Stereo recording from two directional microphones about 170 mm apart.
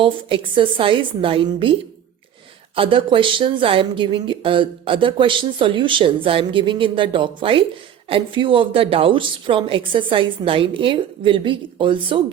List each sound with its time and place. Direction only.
0.0 s a woman's voice: 30° right (ahead or behind)
2.7 s a woman's voice: 30° right (ahead or behind)